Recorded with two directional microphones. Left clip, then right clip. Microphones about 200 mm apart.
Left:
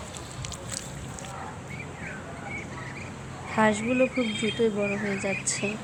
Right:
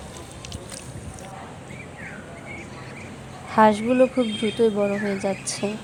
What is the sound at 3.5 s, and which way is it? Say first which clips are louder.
Speech: right 7 dB; 20° right (ahead or behind).